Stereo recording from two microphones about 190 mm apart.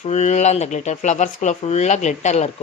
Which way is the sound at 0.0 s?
40° left (ahead or behind).